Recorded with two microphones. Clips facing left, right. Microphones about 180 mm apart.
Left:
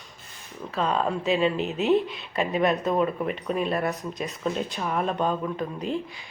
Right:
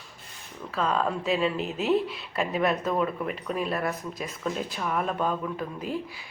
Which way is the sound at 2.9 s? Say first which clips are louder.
Left 3 dB; 10° left (ahead or behind).